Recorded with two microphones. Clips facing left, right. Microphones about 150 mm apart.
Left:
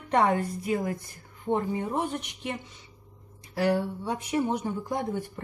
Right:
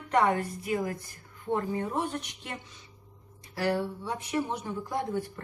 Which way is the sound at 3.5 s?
20° left (ahead or behind).